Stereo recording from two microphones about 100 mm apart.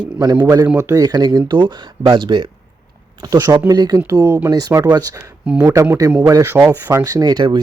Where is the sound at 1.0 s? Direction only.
40° right (ahead or behind).